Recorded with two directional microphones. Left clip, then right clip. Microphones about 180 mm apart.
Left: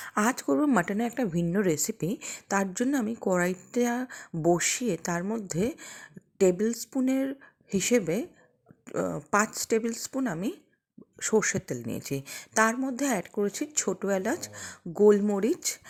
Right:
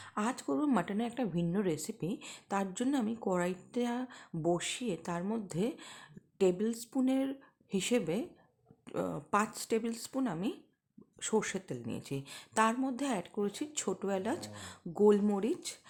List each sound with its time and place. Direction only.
0.0 s speech: 35° left (ahead or behind)